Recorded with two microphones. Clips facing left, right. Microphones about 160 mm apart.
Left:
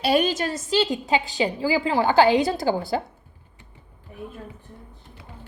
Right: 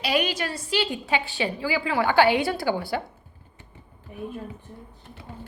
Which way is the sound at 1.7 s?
30° left (ahead or behind).